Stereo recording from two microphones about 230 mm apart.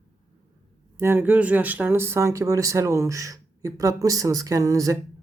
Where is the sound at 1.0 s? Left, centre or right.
Centre.